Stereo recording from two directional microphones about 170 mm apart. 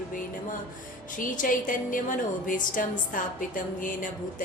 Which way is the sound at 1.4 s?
50° left (ahead or behind).